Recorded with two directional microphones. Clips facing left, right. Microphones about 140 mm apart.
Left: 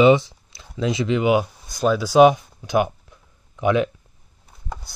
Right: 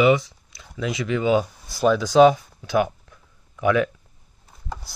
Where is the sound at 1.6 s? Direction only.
Centre (ahead or behind); by 3.9 s 20° left (ahead or behind).